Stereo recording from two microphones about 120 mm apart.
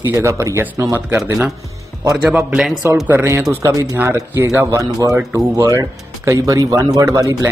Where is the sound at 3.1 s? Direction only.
20° right (ahead or behind).